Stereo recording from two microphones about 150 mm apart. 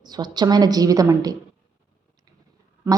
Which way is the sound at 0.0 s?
30° right (ahead or behind).